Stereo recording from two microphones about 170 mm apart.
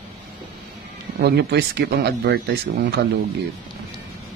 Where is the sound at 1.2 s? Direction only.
70° right (ahead or behind).